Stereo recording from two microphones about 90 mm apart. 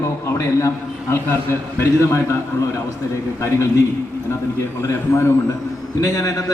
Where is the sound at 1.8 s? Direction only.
30° left (ahead or behind).